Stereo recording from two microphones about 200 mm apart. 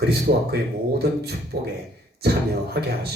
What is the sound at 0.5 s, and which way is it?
A man's voice, 50° right (ahead or behind).